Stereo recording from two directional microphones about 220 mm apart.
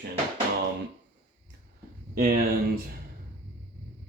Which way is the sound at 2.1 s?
40° right (ahead or behind).